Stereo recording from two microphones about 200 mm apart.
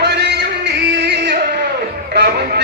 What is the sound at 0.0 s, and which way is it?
Music, 55° right (ahead or behind).